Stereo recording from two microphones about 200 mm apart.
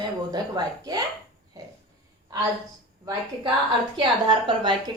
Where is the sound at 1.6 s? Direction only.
20° right (ahead or behind).